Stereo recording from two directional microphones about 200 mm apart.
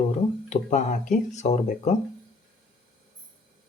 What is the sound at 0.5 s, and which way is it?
Speech, 40° left (ahead or behind).